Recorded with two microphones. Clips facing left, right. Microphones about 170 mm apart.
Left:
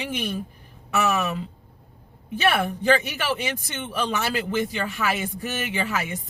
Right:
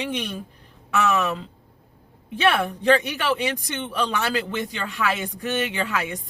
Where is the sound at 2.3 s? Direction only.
5° left (ahead or behind).